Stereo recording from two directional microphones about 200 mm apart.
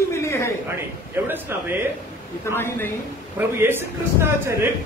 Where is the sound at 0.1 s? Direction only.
15° left (ahead or behind).